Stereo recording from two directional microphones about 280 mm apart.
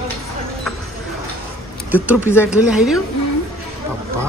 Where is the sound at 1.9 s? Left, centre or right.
Centre.